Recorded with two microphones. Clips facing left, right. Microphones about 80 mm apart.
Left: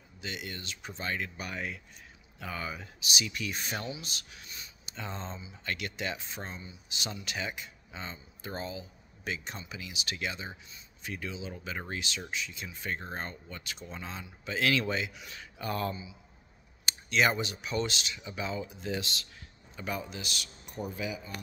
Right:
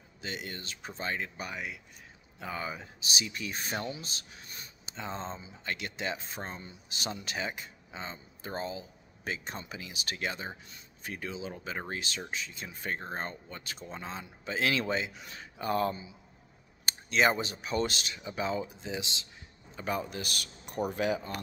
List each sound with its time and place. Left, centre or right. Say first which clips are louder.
0.2 s speech: right 1 dB; right
1.5 s speech: left 1 dB; centre
2.3 s speech: right 1 dB; right
18.8 s speech: left 2 dB; centre
19.7 s speech: right 3 dB; right
20.1 s speech: right 2 dB; right